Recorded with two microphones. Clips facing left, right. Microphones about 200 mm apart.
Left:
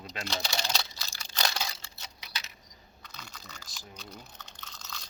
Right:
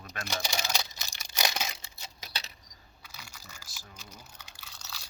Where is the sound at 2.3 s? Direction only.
35° right (ahead or behind).